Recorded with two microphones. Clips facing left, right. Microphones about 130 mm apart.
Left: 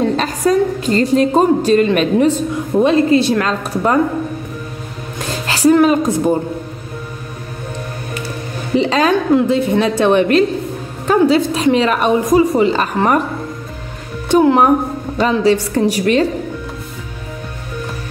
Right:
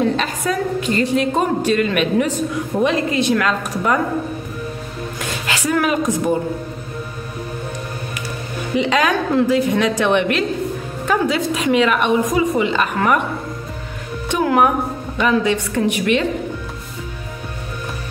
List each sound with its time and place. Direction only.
0.2 s a woman's voice: 35° left (ahead or behind)
5.2 s a woman's voice: 35° left (ahead or behind)
8.7 s a woman's voice: 30° left (ahead or behind)
14.3 s a woman's voice: 30° left (ahead or behind)